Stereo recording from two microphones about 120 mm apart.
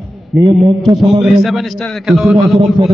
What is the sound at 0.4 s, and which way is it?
Speech, 45° right (ahead or behind).